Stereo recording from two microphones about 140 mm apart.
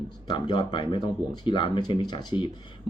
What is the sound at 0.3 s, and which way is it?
Speech, 35° left (ahead or behind).